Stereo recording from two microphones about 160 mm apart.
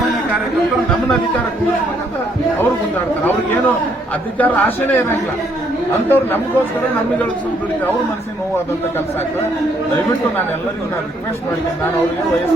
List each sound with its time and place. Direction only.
4.4 s a man's voice: 10° left (ahead or behind)